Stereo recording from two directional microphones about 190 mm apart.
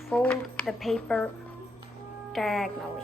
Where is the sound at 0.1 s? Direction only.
5° left (ahead or behind).